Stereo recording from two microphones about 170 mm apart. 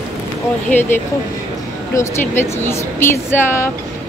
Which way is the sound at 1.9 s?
15° left (ahead or behind).